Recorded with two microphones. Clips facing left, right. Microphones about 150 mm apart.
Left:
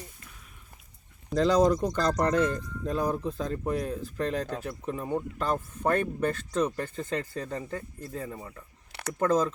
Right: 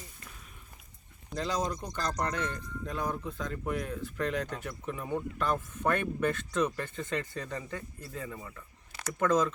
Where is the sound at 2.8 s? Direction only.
35° left (ahead or behind).